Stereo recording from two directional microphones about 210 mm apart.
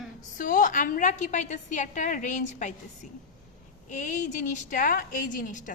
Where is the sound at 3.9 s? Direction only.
35° left (ahead or behind).